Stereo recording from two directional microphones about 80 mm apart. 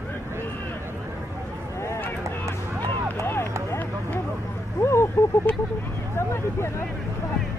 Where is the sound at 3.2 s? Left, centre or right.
Left.